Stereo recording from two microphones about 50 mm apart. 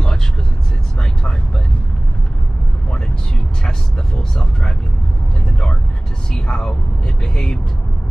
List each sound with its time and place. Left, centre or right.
6.3 s vehicle: centre